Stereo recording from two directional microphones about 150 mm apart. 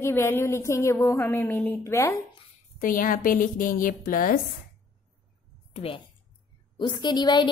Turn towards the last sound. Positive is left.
turn(degrees=30)  # may be behind; listen again after turning